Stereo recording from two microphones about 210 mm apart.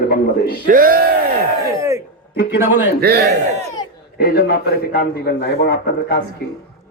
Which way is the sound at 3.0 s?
50° right (ahead or behind).